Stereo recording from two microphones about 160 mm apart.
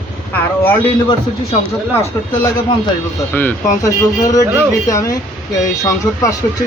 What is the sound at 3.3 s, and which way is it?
Speech, 15° left (ahead or behind).